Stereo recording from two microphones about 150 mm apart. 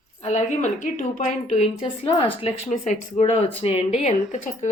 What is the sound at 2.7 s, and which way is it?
Speech, 50° left (ahead or behind).